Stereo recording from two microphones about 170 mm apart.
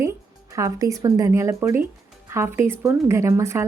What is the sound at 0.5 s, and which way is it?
A woman's voice, 20° right (ahead or behind).